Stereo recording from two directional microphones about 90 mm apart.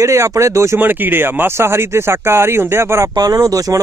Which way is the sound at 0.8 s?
20° right (ahead or behind).